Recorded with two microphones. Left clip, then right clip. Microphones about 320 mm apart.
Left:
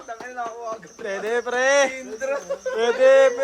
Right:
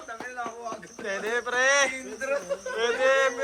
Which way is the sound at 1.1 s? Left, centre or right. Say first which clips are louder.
Left 4 dB; centre.